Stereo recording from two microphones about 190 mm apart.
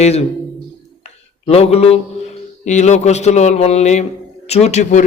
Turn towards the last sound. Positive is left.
turn(degrees=40)  # may be behind; listen again after turning